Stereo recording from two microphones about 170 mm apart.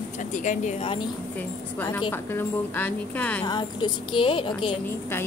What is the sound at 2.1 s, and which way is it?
A woman's voice, 15° left (ahead or behind).